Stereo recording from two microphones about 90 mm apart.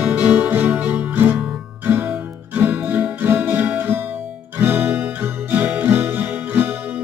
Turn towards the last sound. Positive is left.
turn(degrees=-25)  # may be behind; listen again after turning